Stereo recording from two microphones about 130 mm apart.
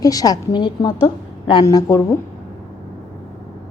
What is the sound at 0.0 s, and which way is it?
A woman's voice, 30° left (ahead or behind).